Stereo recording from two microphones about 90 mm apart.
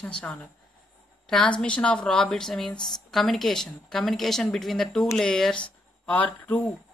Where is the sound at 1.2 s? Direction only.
5° left (ahead or behind).